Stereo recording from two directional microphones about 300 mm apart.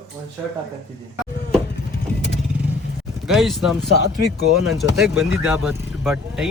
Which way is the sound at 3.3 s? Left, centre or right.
Centre.